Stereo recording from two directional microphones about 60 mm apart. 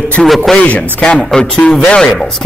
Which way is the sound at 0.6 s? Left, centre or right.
Left.